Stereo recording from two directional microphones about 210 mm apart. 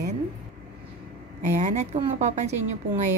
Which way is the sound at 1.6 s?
35° right (ahead or behind).